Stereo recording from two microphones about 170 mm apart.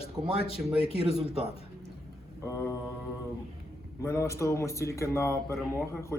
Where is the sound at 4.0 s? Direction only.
15° left (ahead or behind).